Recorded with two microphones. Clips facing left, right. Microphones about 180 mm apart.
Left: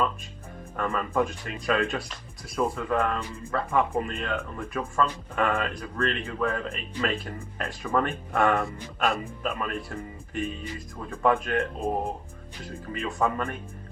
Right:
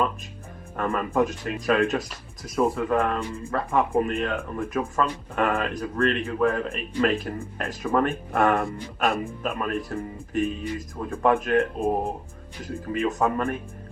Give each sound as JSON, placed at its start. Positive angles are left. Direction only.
{"t": 0.8, "sound": "speech", "side_deg": -40}
{"t": 12.6, "sound": "speech", "side_deg": -45}